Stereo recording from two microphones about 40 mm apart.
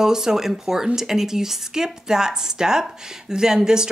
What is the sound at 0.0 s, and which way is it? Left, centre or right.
Speech, centre.